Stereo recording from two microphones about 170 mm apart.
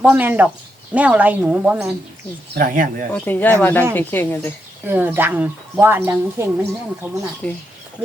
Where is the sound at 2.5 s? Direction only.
55° right (ahead or behind).